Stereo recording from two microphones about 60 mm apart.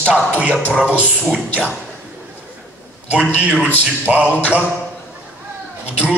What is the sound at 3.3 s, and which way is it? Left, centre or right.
Speech, right.